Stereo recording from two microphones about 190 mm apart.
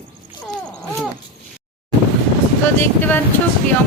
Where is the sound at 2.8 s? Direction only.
10° left (ahead or behind).